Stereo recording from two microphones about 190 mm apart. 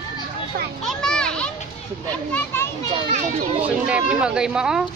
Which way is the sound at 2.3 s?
10° left (ahead or behind).